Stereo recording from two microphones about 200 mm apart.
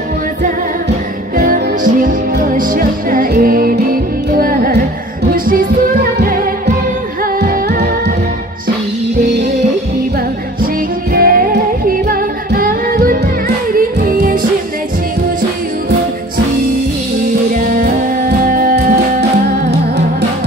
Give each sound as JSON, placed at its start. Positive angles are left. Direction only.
{"t": 1.3, "sound": "music", "side_deg": -40}
{"t": 11.1, "sound": "music", "side_deg": -45}
{"t": 17.5, "sound": "music", "side_deg": -45}